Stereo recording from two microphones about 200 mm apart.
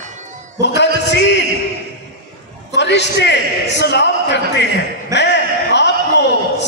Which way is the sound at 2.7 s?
60° left (ahead or behind).